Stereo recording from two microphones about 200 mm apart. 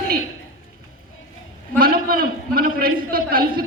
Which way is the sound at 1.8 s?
45° right (ahead or behind).